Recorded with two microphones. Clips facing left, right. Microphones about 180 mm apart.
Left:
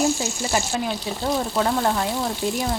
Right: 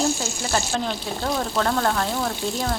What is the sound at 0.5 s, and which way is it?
Speech, 10° left (ahead or behind).